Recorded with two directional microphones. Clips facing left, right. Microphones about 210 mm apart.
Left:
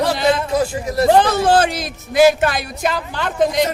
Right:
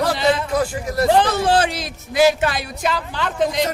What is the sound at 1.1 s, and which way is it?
A man's voice, 50° left (ahead or behind).